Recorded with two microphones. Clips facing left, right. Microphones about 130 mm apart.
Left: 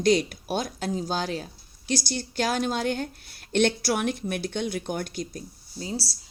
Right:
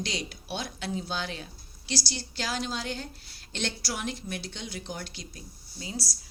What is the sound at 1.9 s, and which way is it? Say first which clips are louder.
A woman's voice: left 6 dB; 50° left (ahead or behind).